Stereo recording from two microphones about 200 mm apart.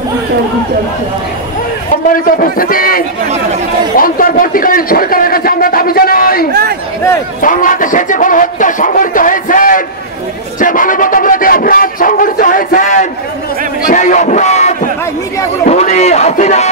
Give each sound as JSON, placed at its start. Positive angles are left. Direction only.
{"t": 2.1, "sound": "a man's voice", "side_deg": 45}
{"t": 4.0, "sound": "a man's voice", "side_deg": 45}
{"t": 7.4, "sound": "a man's voice", "side_deg": 40}